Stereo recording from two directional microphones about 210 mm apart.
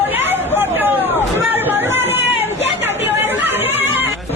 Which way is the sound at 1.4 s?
10° right (ahead or behind).